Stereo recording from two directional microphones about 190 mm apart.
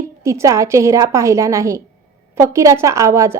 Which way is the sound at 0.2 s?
15° right (ahead or behind).